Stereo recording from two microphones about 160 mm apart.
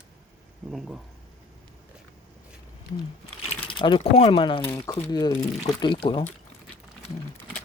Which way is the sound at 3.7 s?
30° left (ahead or behind).